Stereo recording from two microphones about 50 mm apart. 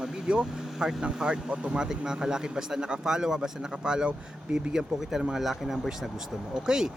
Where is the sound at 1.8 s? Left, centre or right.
Centre.